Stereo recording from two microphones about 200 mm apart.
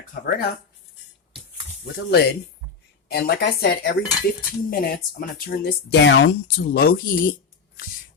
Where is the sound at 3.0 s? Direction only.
50° left (ahead or behind).